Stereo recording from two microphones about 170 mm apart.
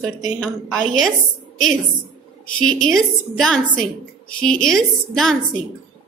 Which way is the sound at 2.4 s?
5° left (ahead or behind).